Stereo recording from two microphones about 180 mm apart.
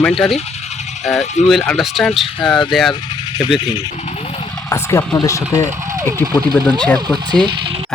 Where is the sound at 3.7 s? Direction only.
35° left (ahead or behind).